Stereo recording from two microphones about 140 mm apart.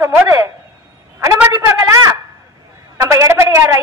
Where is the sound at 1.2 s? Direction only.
20° right (ahead or behind).